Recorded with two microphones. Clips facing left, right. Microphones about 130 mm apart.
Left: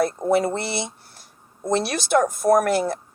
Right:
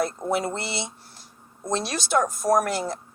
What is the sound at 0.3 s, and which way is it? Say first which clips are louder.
Speech: left 6 dB; 55° left (ahead or behind).